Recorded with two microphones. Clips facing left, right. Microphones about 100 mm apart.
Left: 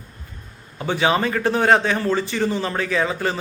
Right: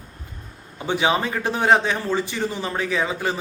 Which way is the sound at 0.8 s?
15° right (ahead or behind).